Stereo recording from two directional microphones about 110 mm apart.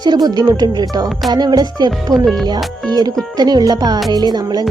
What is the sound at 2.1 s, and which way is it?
Speech, centre (ahead or behind).